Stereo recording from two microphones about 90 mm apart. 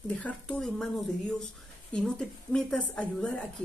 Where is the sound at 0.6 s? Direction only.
5° left (ahead or behind).